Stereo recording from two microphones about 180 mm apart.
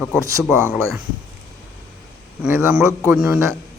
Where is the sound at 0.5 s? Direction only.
15° right (ahead or behind).